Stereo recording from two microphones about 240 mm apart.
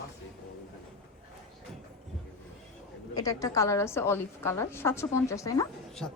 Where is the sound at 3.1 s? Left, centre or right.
Centre.